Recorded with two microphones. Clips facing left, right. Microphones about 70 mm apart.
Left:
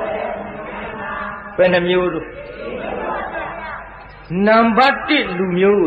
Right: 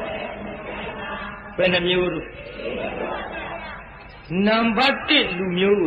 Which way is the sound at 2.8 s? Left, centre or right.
Left.